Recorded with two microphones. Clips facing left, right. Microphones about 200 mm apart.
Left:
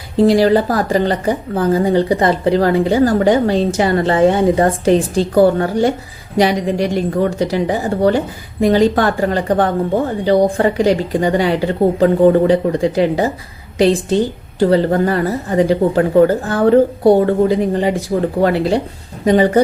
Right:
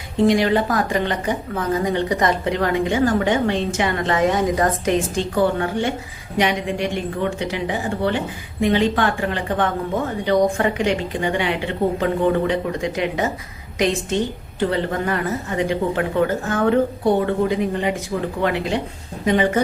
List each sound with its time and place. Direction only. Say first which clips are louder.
0.2 s a woman's voice: left 5 dB; 35° left (ahead or behind)